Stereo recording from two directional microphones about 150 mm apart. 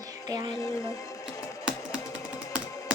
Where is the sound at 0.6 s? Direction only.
20° left (ahead or behind).